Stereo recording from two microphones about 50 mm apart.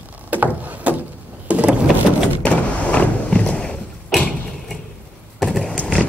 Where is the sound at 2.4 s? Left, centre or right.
Left.